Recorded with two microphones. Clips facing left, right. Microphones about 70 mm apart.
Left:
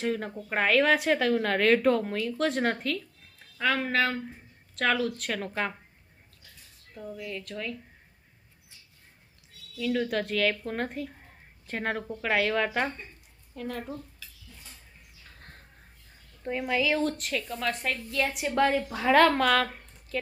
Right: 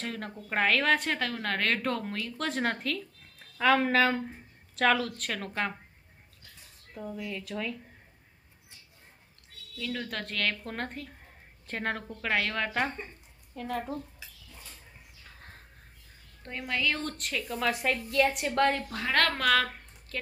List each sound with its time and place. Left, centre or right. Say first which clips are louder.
0.0 s a woman's voice: left 7 dB; centre
6.9 s a woman's voice: even; centre
9.7 s a woman's voice: left 8 dB; centre
13.9 s a sound: right 3 dB; right
15.3 s bird: even; centre
16.4 s a woman's voice: left 5 dB; centre